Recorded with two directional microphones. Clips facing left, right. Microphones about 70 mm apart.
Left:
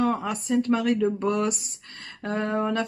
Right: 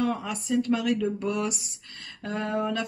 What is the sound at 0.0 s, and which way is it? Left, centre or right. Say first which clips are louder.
Speech: left 3 dB; left.